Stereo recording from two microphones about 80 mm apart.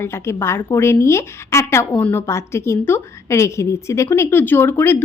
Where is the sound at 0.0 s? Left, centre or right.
Left.